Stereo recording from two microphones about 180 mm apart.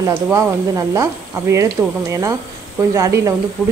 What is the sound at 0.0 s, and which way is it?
Speech, 15° right (ahead or behind).